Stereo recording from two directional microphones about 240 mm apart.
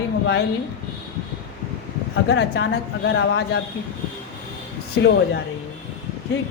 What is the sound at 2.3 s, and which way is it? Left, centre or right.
Speech, left.